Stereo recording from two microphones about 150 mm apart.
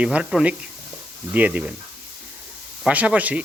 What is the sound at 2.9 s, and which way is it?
Speech, 10° right (ahead or behind).